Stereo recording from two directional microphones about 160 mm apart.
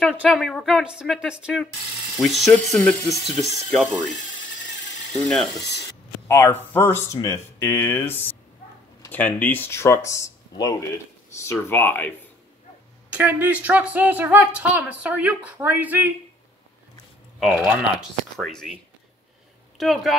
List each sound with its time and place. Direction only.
0.0 s speech: 5° right (ahead or behind)
5.1 s speech: 5° left (ahead or behind)
6.2 s speech: 15° left (ahead or behind)
13.1 s speech: 10° right (ahead or behind)
17.4 s speech: centre (ahead or behind)
19.8 s speech: centre (ahead or behind)